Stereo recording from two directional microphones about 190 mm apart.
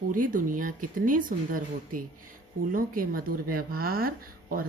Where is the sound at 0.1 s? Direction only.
45° right (ahead or behind).